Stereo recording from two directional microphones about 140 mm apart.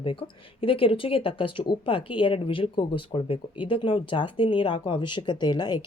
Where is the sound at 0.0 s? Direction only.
40° left (ahead or behind).